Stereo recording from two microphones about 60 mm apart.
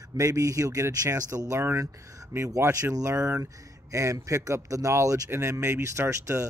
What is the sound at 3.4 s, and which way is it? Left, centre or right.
Speech, right.